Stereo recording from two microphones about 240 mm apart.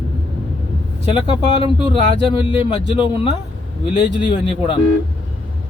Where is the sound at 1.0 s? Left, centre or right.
Left.